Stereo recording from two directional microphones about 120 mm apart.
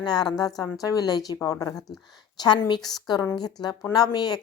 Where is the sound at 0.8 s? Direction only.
30° left (ahead or behind).